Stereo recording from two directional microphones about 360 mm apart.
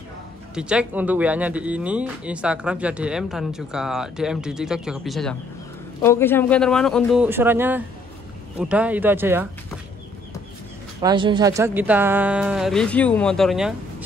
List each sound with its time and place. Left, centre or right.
0.6 s speech: centre
11.0 s speech: centre